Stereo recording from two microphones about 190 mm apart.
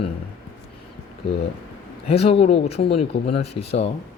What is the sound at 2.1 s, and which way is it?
Speech, 30° left (ahead or behind).